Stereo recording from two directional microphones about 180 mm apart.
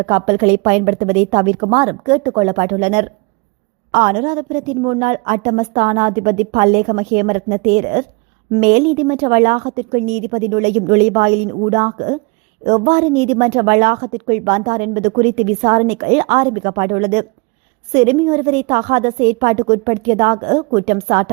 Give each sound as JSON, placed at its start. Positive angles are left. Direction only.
{"t": 0.0, "sound": "a woman's voice", "side_deg": -35}